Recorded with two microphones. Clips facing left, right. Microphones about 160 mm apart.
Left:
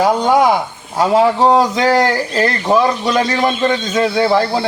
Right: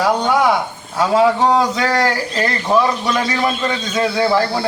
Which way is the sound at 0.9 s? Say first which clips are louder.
Left 2 dB; 25° left (ahead or behind).